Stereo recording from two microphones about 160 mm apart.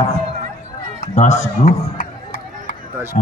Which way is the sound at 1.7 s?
65° left (ahead or behind).